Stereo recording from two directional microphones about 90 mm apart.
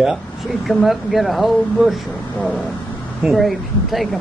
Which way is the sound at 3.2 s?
5° right (ahead or behind).